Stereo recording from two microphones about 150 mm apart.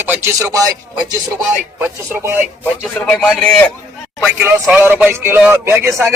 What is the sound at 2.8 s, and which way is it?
Speech, centre (ahead or behind).